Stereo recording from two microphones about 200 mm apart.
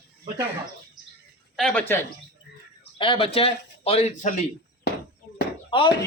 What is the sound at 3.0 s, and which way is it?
A man's voice, 25° left (ahead or behind).